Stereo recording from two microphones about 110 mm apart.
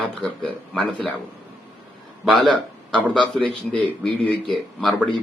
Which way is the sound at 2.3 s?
10° left (ahead or behind).